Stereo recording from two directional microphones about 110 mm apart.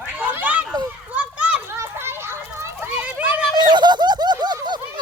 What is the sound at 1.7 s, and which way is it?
Children playing, 20° right (ahead or behind).